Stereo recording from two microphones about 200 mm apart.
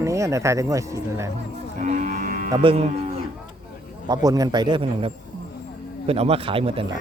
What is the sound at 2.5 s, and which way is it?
Speech, 25° right (ahead or behind).